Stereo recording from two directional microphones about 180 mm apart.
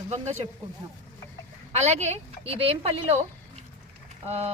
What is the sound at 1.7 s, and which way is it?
A woman's voice, 35° right (ahead or behind).